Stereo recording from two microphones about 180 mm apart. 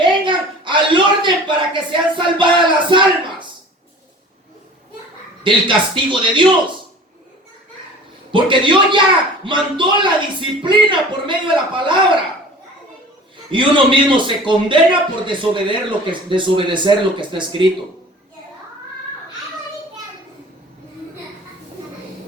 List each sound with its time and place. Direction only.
0.0 s a sound: 25° right (ahead or behind)
5.4 s a man's voice: 25° right (ahead or behind)
8.3 s a man's voice: 25° right (ahead or behind)
13.5 s a man's voice: 25° right (ahead or behind)